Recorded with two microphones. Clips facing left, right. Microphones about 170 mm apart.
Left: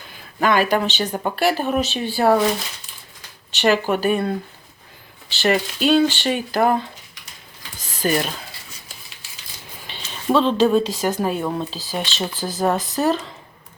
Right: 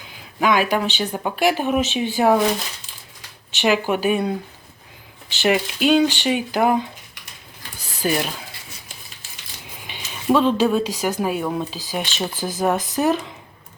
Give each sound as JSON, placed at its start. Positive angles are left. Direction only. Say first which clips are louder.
{"t": 0.1, "sound": "a sound", "louder": "even", "side_deg": -10}
{"t": 0.7, "sound": "speech", "louder": "left 1 dB", "side_deg": -10}
{"t": 3.6, "sound": "speech", "louder": "left 1 dB", "side_deg": -10}
{"t": 8.0, "sound": "speech", "louder": "left 1 dB", "side_deg": -5}
{"t": 9.8, "sound": "a sound", "louder": "even", "side_deg": -15}
{"t": 10.2, "sound": "speech", "louder": "even", "side_deg": -10}